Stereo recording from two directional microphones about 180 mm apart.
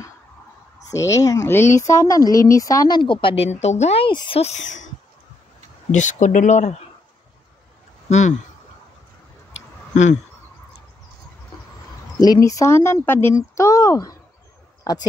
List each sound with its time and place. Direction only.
0.8 s a woman's voice: 15° left (ahead or behind); by 4.8 s 40° left (ahead or behind)
5.9 s speech: 45° left (ahead or behind)
8.1 s speech: 40° left (ahead or behind)
12.2 s speech: 20° left (ahead or behind)